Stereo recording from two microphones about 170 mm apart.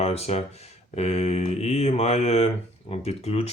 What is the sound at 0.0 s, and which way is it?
Speech, 40° left (ahead or behind).